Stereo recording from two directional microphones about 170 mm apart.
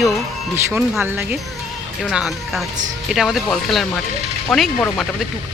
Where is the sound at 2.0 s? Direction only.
Centre (ahead or behind).